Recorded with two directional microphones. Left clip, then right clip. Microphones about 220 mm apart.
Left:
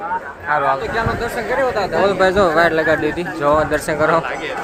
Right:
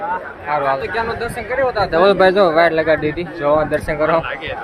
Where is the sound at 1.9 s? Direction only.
45° right (ahead or behind).